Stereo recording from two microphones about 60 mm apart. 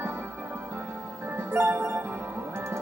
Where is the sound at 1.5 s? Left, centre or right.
Right.